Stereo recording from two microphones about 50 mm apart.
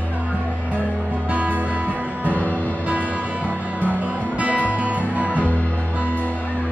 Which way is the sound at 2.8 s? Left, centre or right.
Right.